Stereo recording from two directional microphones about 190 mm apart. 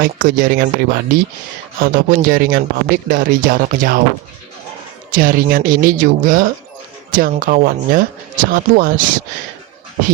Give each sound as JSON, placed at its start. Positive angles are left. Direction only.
{"t": 0.0, "sound": "speech", "side_deg": -45}
{"t": 5.1, "sound": "speech", "side_deg": -50}